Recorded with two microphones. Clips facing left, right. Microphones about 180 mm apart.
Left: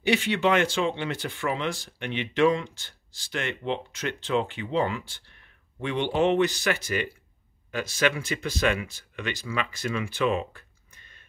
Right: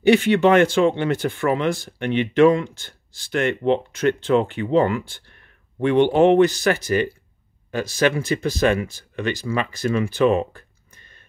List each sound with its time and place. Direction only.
0.0 s speech: 50° right (ahead or behind)